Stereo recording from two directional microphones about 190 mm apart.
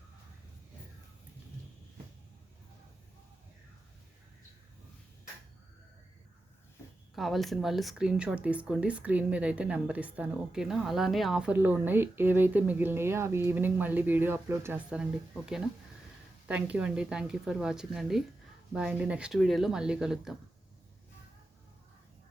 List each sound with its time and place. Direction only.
7.2 s speech: centre (ahead or behind)
16.5 s speech: 5° right (ahead or behind)